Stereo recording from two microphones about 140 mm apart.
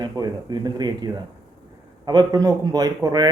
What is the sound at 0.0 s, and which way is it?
Speech, 30° right (ahead or behind).